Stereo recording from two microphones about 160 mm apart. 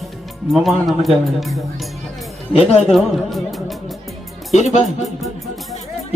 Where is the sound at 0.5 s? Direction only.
Centre (ahead or behind).